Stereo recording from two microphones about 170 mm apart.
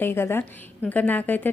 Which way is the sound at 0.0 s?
15° left (ahead or behind).